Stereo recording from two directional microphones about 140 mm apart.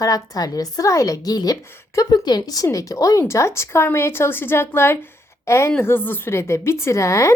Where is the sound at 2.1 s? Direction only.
30° left (ahead or behind).